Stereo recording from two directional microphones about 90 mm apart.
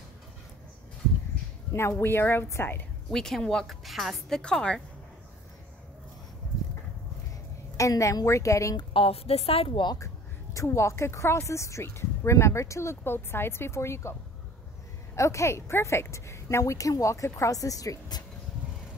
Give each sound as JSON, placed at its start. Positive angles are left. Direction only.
{"t": 1.7, "sound": "a woman's voice", "side_deg": 30}
{"t": 3.1, "sound": "speech", "side_deg": 5}
{"t": 7.7, "sound": "a woman's voice", "side_deg": 35}
{"t": 8.9, "sound": "a woman's voice", "side_deg": 90}
{"t": 9.9, "sound": "a woman's voice", "side_deg": 35}
{"t": 15.1, "sound": "a woman's voice", "side_deg": 35}